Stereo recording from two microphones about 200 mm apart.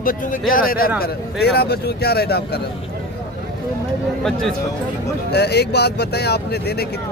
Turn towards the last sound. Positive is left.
turn(degrees=55)  # may be behind; listen again after turning